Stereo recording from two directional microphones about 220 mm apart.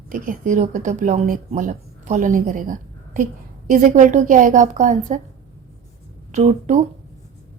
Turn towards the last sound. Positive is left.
turn(degrees=-30)  # may be behind; listen again after turning